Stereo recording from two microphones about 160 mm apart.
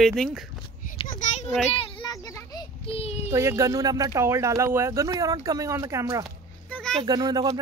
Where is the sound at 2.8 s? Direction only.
35° left (ahead or behind).